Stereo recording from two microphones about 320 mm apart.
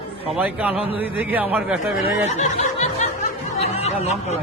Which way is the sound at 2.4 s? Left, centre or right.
Left.